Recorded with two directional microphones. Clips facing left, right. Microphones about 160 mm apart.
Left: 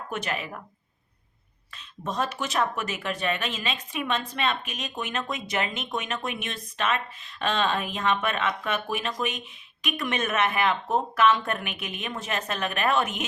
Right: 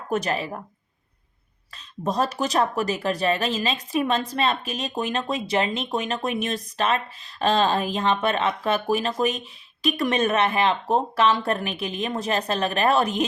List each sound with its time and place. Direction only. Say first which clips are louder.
0.1 s speech: right 8 dB; 35° right (ahead or behind)
1.7 s speech: right 6 dB; 35° right (ahead or behind)